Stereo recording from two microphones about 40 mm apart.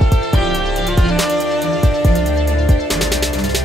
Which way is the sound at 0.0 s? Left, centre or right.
Centre.